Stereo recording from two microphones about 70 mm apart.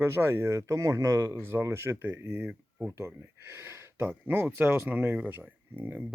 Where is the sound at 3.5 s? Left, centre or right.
Right.